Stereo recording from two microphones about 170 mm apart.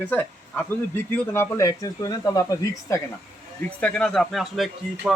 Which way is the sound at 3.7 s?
10° left (ahead or behind).